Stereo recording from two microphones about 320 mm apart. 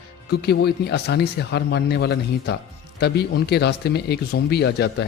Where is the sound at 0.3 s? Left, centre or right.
Left.